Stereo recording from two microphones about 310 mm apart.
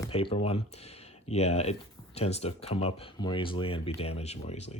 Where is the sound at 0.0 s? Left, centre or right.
Centre.